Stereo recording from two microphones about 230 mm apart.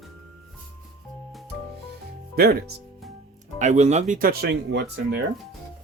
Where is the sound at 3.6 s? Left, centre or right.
Right.